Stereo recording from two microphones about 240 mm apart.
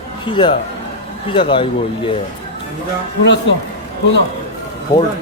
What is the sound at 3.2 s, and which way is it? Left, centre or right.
Speech, left.